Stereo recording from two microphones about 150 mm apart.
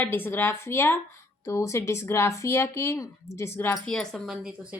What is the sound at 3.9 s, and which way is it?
Speech, 5° left (ahead or behind).